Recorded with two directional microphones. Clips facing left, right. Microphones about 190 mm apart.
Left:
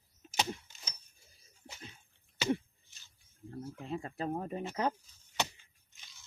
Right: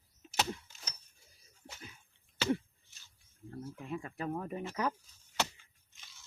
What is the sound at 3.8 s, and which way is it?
Speech, 30° left (ahead or behind).